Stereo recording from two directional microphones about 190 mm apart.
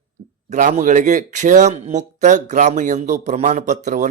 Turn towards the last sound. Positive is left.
turn(degrees=-40)  # may be behind; listen again after turning